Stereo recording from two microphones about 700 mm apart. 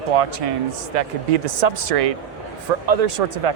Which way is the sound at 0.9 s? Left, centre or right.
Right.